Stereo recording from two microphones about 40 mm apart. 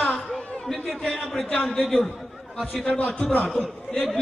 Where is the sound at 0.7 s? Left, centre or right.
Centre.